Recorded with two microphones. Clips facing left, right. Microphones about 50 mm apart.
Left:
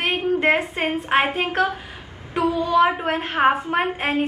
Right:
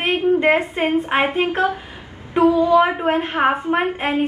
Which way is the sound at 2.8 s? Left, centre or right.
Centre.